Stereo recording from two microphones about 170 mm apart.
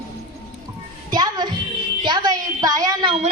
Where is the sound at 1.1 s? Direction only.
25° right (ahead or behind).